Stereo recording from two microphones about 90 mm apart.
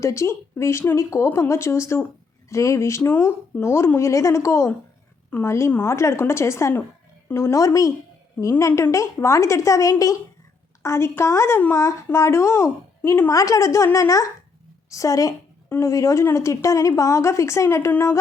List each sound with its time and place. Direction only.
0.0 s a woman's voice: 35° left (ahead or behind)
13.3 s a woman's voice: 40° left (ahead or behind)